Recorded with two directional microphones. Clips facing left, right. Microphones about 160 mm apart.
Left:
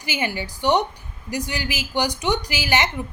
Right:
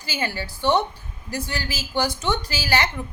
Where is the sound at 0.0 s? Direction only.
20° left (ahead or behind).